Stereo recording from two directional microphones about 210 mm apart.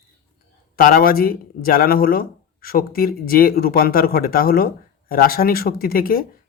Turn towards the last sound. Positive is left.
turn(degrees=45)  # may be behind; listen again after turning